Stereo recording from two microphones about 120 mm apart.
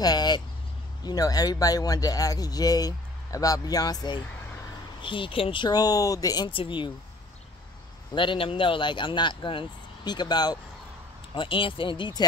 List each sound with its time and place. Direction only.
0.0 s speech: 35° left (ahead or behind)
5.0 s speech: 45° left (ahead or behind)
6.5 s speech: 45° left (ahead or behind)
8.1 s speech: 45° left (ahead or behind)
11.3 s speech: 45° left (ahead or behind)